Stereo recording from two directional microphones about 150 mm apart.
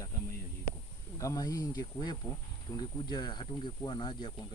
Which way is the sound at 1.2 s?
25° left (ahead or behind).